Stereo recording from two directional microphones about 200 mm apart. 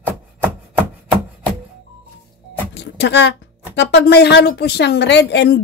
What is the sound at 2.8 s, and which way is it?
A woman's voice, 60° left (ahead or behind).